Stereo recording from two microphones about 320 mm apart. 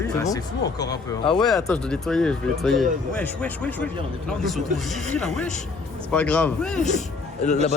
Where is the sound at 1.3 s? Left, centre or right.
Centre.